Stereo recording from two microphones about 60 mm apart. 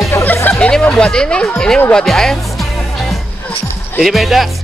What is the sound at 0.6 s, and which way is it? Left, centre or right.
Speech, centre.